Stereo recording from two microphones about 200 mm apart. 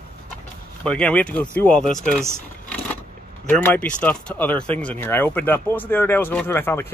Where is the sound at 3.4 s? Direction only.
10° left (ahead or behind).